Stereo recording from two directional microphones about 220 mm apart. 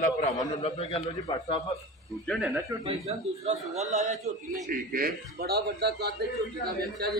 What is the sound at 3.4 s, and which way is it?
Speech, 30° right (ahead or behind).